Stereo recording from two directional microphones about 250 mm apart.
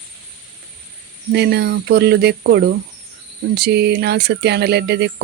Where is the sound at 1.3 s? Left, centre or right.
Right.